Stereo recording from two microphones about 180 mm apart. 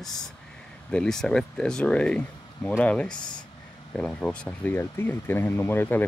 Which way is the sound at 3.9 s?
5° left (ahead or behind).